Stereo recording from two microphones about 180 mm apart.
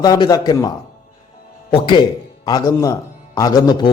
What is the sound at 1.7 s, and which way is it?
Speech, 25° left (ahead or behind).